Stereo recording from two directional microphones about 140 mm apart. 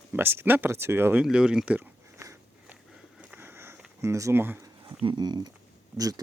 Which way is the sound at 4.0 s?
20° right (ahead or behind).